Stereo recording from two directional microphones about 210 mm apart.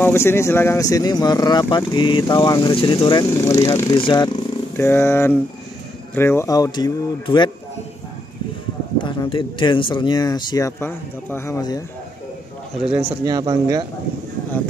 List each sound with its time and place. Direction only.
0.0 s speech: 10° left (ahead or behind)
8.9 s speech: 20° left (ahead or behind)
12.7 s a man's voice: 5° right (ahead or behind)
13.2 s speech: 20° right (ahead or behind)